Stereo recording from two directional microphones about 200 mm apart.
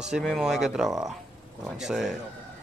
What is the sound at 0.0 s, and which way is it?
Speech, centre (ahead or behind).